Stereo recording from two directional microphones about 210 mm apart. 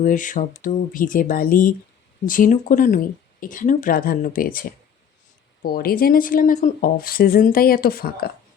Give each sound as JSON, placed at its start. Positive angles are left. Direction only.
{"t": 0.0, "sound": "speech", "side_deg": 40}